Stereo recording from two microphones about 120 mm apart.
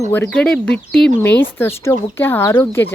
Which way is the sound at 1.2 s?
20° left (ahead or behind).